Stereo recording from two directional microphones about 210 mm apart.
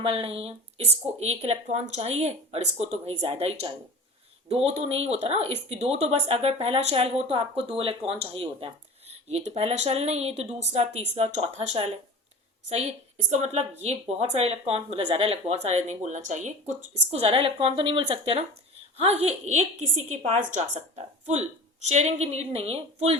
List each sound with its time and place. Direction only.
0.0 s a woman's voice: 25° right (ahead or behind)